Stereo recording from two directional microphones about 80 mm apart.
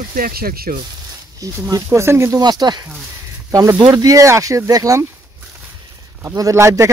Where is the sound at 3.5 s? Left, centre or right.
Right.